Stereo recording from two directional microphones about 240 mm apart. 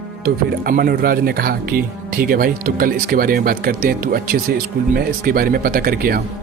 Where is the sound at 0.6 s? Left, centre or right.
Right.